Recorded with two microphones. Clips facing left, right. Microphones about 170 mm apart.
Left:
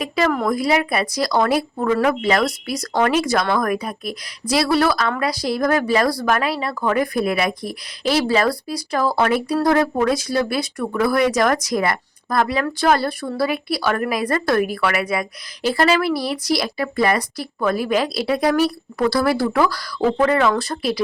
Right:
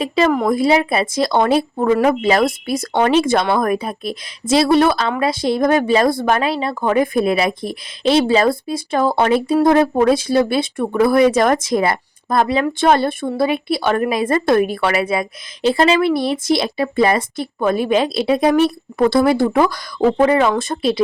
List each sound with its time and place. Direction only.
0.0 s a woman's voice: 25° right (ahead or behind)